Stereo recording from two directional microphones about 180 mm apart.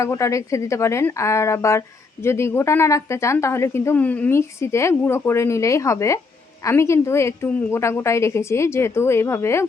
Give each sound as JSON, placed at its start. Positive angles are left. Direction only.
{"t": 0.0, "sound": "speech", "side_deg": 15}